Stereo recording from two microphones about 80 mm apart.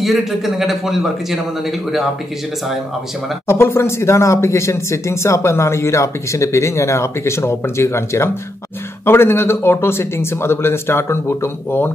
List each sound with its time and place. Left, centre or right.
0.0 s a man's voice: centre
3.4 s speech: left